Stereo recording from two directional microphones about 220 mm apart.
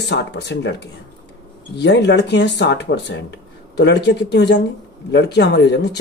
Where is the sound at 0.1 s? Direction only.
50° left (ahead or behind).